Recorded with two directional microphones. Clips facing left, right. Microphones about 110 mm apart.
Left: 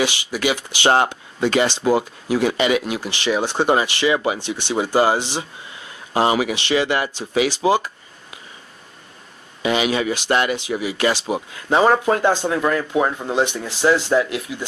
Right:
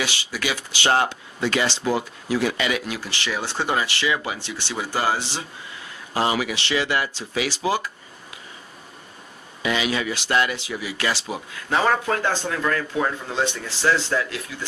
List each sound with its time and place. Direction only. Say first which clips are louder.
0.0 s speech: left 6 dB; 20° left (ahead or behind)
9.6 s speech: left 5 dB; 25° left (ahead or behind)